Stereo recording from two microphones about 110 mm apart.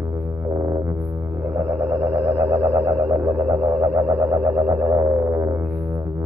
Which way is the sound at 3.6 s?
20° right (ahead or behind).